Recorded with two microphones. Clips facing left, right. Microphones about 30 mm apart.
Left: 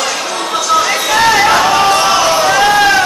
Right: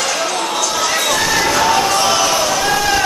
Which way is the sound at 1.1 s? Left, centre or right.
Left.